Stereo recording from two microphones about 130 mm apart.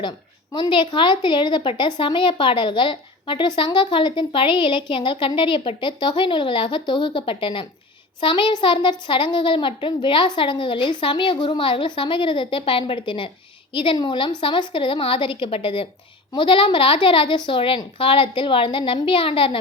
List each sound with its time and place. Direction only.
0.5 s a child's voice: 35° left (ahead or behind)